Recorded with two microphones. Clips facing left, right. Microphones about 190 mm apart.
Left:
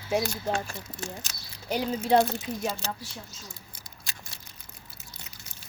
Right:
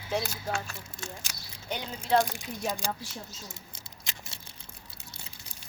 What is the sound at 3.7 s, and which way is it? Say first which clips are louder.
Biting: even; 25° right (ahead or behind).